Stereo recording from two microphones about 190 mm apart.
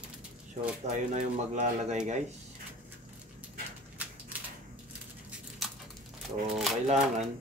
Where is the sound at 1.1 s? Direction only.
35° right (ahead or behind).